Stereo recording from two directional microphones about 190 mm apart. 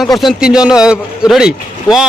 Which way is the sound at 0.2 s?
Centre (ahead or behind).